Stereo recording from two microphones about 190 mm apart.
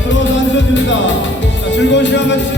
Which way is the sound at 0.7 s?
75° left (ahead or behind).